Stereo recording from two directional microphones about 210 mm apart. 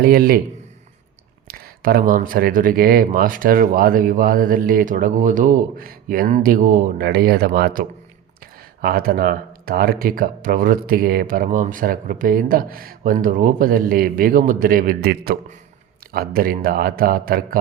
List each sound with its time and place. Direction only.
0.0 s speech: 45° right (ahead or behind)
1.5 s speech: 45° right (ahead or behind)